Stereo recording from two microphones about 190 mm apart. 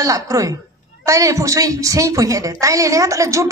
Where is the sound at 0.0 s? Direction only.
15° right (ahead or behind).